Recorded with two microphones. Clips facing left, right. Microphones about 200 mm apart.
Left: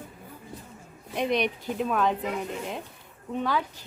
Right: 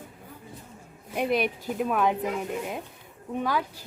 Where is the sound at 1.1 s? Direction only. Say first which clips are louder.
Even; 5° right (ahead or behind).